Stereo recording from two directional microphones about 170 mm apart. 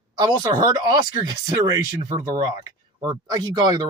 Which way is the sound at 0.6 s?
25° right (ahead or behind).